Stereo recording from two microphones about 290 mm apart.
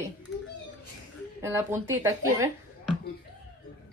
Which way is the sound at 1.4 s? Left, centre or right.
Centre.